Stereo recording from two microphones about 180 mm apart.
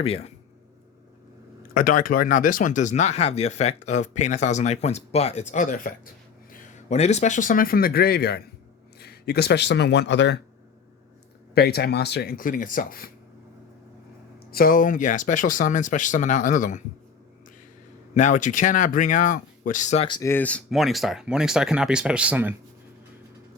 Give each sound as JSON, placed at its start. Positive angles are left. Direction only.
{"t": 0.0, "sound": "speech", "side_deg": 35}
{"t": 1.7, "sound": "speech", "side_deg": 50}
{"t": 11.5, "sound": "speech", "side_deg": 60}
{"t": 14.5, "sound": "speech", "side_deg": 55}
{"t": 18.1, "sound": "speech", "side_deg": 40}
{"t": 20.1, "sound": "speech", "side_deg": 25}
{"t": 20.3, "sound": "speech", "side_deg": 10}